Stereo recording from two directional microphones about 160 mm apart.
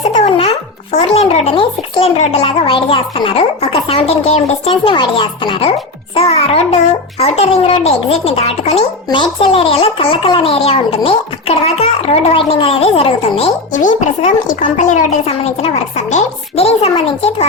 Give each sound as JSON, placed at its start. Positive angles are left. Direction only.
{"t": 0.1, "sound": "babbling", "side_deg": 35}
{"t": 0.9, "sound": "a child's voice", "side_deg": 40}